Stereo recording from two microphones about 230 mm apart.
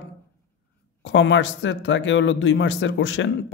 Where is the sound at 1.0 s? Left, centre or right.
Left.